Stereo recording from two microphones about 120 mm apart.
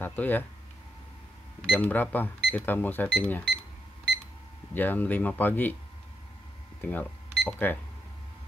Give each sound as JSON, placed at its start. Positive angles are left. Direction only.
{"t": 0.0, "sound": "speech", "side_deg": 15}
{"t": 1.7, "sound": "speech", "side_deg": 15}
{"t": 4.7, "sound": "speech", "side_deg": 15}
{"t": 6.8, "sound": "speech", "side_deg": 15}